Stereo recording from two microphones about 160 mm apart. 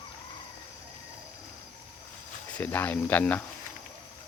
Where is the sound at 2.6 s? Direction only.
10° left (ahead or behind).